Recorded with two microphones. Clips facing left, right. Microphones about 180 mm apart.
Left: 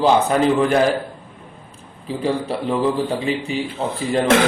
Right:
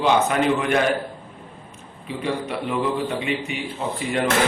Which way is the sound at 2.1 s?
30° left (ahead or behind).